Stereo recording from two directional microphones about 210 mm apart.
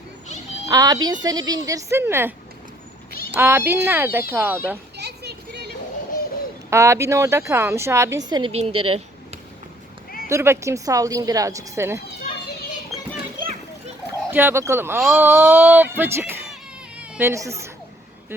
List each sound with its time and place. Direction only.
0.7 s speech: 20° right (ahead or behind)
3.3 s speech: 10° right (ahead or behind)
4.9 s a sound: 50° right (ahead or behind)
6.7 s speech: 15° right (ahead or behind)
8.9 s a sound: 30° right (ahead or behind)
10.2 s speech: 10° right (ahead or behind)
14.3 s speech: 10° right (ahead or behind)